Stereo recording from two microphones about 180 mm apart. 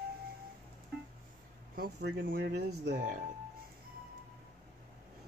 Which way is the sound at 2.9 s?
50° right (ahead or behind).